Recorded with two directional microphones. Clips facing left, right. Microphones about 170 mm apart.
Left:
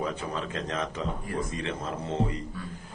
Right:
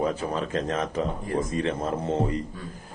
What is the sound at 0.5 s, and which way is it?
Speech, 45° right (ahead or behind).